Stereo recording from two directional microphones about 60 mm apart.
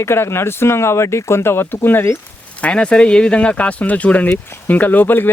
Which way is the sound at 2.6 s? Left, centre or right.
Centre.